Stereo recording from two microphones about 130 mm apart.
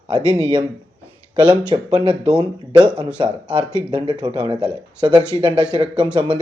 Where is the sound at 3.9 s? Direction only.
40° right (ahead or behind).